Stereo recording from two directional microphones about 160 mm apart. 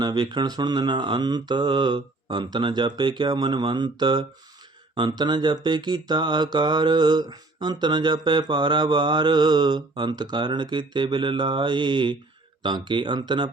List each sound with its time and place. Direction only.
0.0 s speech: 25° right (ahead or behind)